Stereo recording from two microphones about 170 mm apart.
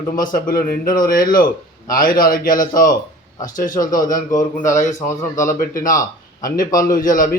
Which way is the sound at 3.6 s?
50° left (ahead or behind).